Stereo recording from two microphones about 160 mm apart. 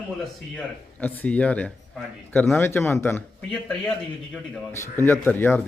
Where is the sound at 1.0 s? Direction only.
10° left (ahead or behind).